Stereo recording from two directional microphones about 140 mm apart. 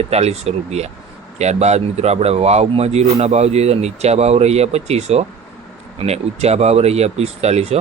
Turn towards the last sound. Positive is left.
turn(degrees=-50)  # may be behind; listen again after turning